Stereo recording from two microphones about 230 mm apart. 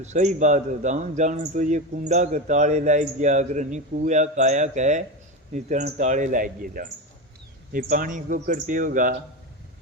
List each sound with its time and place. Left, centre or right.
0.0 s a man's voice: right